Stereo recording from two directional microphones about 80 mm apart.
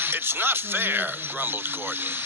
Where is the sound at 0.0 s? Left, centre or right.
Right.